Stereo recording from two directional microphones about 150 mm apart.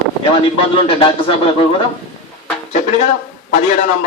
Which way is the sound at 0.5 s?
40° left (ahead or behind).